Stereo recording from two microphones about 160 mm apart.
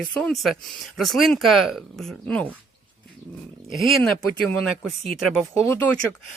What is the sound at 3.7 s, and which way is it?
Speech, centre (ahead or behind).